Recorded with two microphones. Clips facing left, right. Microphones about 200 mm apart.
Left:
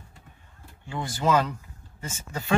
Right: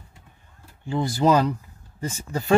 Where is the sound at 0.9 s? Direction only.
35° right (ahead or behind).